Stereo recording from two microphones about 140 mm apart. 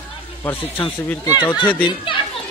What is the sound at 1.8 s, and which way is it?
Speech, 35° left (ahead or behind).